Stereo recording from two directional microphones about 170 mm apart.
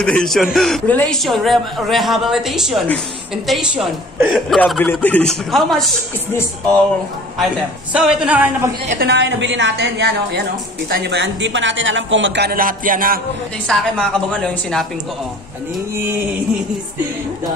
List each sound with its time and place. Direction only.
0.0 s a man's voice: 5° left (ahead or behind)
4.6 s a man's voice: 10° left (ahead or behind)
7.3 s a man's voice: centre (ahead or behind)
8.9 s a woman's voice: 90° right; by 13.2 s 55° right (ahead or behind)
13.7 s a man's voice: 5° left (ahead or behind)